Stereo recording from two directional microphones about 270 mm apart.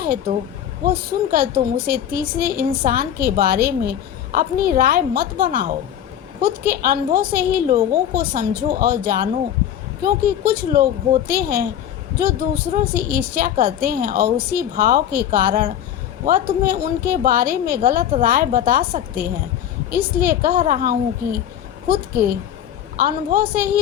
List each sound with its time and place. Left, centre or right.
0.0 s a woman's voice: right
10.4 s a woman's voice: right